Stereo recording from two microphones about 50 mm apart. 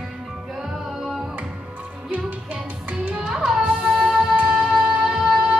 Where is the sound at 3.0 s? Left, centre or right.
Centre.